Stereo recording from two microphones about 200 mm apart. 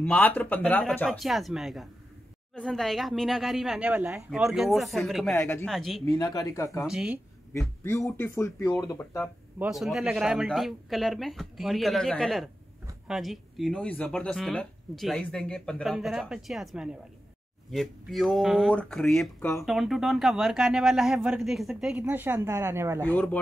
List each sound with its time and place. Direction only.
0.0 s speech: 10° left (ahead or behind)
5.3 s speech: 15° left (ahead or behind)
5.7 s speech: centre (ahead or behind)
6.1 s speech: 20° left (ahead or behind)
6.8 s speech: 5° right (ahead or behind)
7.5 s speech: 15° left (ahead or behind)
9.6 s speech: centre (ahead or behind)
23.0 s speech: 10° left (ahead or behind)